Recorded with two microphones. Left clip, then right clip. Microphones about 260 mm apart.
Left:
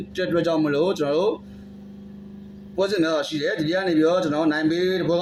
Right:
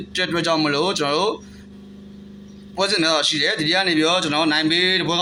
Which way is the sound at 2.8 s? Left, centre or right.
Right.